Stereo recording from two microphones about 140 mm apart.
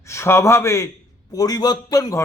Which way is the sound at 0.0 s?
20° left (ahead or behind).